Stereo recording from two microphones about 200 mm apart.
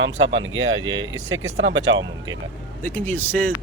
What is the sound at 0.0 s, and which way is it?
Speech, 70° right (ahead or behind).